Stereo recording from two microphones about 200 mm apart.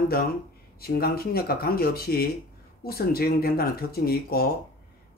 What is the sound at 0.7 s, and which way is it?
Speech, 50° left (ahead or behind).